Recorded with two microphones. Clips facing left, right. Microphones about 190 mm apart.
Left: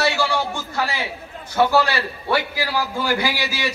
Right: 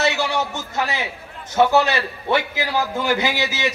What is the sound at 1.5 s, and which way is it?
A man's voice, 20° right (ahead or behind).